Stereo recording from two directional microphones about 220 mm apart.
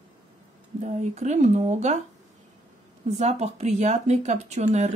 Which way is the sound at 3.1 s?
30° right (ahead or behind).